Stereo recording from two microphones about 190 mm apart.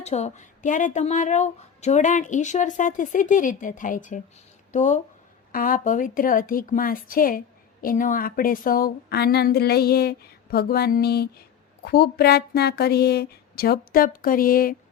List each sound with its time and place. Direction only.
0.0 s a woman's voice: 35° left (ahead or behind)